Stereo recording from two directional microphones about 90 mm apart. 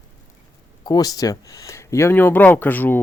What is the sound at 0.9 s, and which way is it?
Speech, 45° left (ahead or behind).